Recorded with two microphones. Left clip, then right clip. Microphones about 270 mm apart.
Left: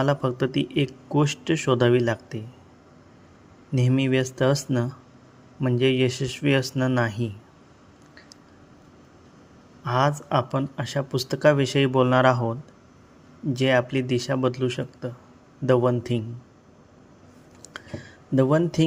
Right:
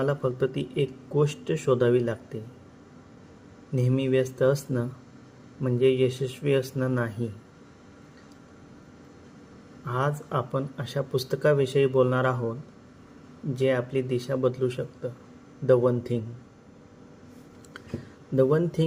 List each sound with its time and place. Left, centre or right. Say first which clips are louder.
0.0 s speech: left 2 dB; left
3.8 s speech: left 1 dB; left
9.8 s speech: left 6 dB; left
13.6 s speech: left 3 dB; left
18.3 s speech: left 2 dB; left